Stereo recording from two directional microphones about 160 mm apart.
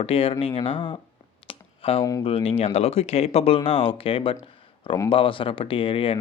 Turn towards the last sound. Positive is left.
turn(degrees=35)  # may be behind; listen again after turning